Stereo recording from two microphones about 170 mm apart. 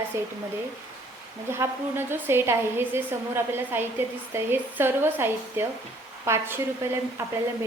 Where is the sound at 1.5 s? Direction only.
15° right (ahead or behind).